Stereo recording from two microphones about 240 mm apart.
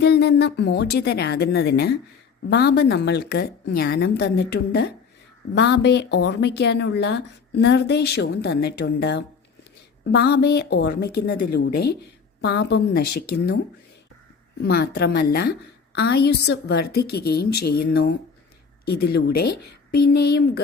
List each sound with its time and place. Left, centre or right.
0.0 s a woman's voice: left
14.6 s a woman's voice: left
17.5 s a sound: left
17.7 s a woman's voice: left